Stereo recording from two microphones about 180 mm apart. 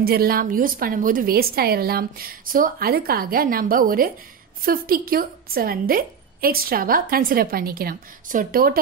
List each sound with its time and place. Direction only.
0.0 s a woman's voice: 55° right (ahead or behind)